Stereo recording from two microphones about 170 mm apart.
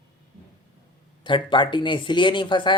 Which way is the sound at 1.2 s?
30° left (ahead or behind).